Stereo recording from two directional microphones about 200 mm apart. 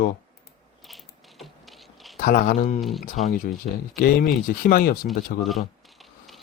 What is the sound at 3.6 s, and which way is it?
Speech, 40° left (ahead or behind).